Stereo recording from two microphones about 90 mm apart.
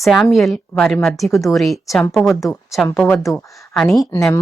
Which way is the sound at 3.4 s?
35° left (ahead or behind).